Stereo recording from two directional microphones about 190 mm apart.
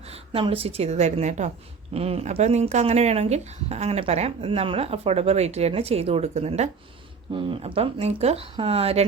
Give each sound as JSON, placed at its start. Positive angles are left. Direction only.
{"t": 0.1, "sound": "speech", "side_deg": -30}